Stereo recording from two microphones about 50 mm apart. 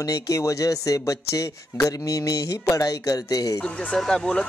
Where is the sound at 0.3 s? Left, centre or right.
Left.